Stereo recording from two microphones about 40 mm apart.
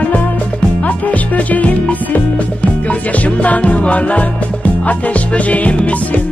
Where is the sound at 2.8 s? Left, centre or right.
Left.